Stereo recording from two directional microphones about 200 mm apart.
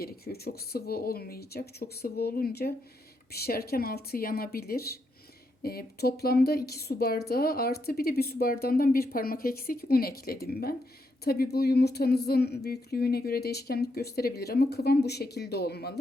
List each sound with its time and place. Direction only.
0.0 s a woman's voice: 50° left (ahead or behind)